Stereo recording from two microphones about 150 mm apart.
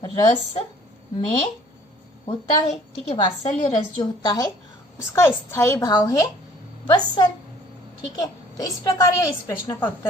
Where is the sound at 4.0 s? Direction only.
25° left (ahead or behind).